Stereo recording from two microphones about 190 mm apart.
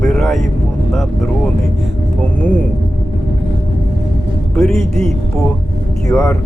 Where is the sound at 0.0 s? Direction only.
Centre (ahead or behind).